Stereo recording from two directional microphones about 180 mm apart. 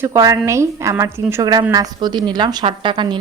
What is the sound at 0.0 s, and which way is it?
A woman's voice, 15° right (ahead or behind).